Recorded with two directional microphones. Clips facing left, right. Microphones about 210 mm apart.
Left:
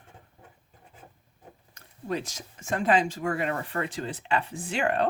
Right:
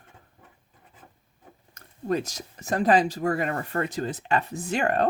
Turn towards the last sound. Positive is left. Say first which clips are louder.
# right 2 dB
turn(degrees=-40)  # may be behind; listen again after turning